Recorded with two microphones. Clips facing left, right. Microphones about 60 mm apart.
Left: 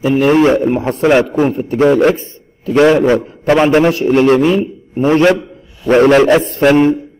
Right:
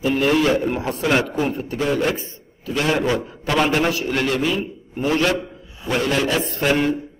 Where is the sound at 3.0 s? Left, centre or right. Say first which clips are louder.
Left 9 dB; left.